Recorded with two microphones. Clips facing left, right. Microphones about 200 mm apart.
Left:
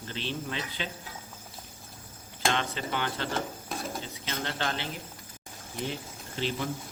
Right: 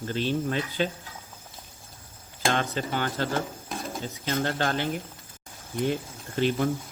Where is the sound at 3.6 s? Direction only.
Centre (ahead or behind).